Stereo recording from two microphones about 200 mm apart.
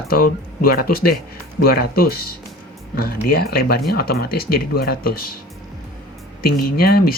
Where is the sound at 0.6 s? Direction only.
50° left (ahead or behind).